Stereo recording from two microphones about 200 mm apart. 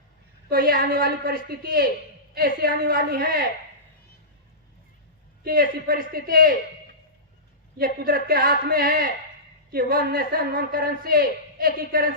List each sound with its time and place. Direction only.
0.5 s a man's voice: 45° right (ahead or behind)
5.4 s a man's voice: 45° right (ahead or behind)
7.8 s a man's voice: 45° right (ahead or behind)